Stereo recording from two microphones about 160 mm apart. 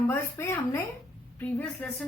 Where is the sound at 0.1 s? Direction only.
15° left (ahead or behind).